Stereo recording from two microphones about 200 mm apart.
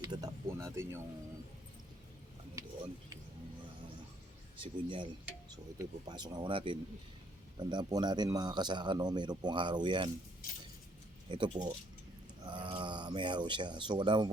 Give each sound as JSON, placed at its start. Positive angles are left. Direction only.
{"t": 0.0, "sound": "a sound", "side_deg": -20}
{"t": 4.6, "sound": "speech", "side_deg": -25}
{"t": 11.3, "sound": "speech", "side_deg": -20}